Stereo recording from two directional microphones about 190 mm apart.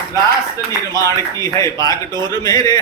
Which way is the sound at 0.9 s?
20° left (ahead or behind).